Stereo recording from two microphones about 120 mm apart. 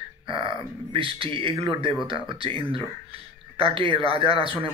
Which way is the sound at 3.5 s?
45° right (ahead or behind).